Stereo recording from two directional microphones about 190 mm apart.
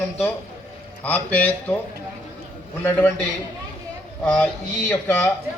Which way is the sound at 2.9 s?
10° left (ahead or behind).